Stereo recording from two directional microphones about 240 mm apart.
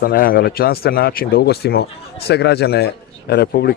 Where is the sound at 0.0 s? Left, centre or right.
Left.